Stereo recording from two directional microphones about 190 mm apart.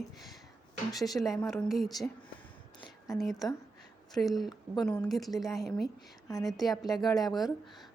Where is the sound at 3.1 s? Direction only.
Centre (ahead or behind).